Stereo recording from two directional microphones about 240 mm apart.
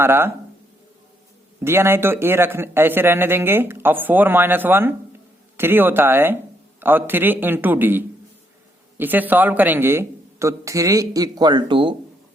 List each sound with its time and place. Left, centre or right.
0.0 s a man's voice: centre
1.6 s a man's voice: centre